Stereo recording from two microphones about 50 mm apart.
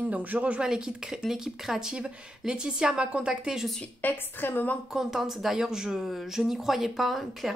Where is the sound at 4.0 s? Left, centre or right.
Left.